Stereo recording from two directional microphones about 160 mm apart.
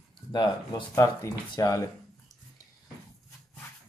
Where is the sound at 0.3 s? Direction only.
30° left (ahead or behind).